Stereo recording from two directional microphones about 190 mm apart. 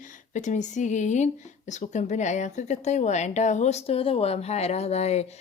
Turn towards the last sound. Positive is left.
turn(degrees=35)  # may be behind; listen again after turning